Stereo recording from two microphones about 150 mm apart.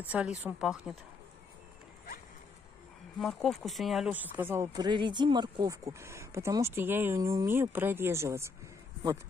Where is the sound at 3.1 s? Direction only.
Centre (ahead or behind).